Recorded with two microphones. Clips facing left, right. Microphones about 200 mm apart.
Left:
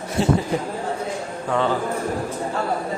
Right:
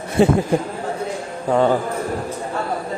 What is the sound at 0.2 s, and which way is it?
Speech, 55° right (ahead or behind).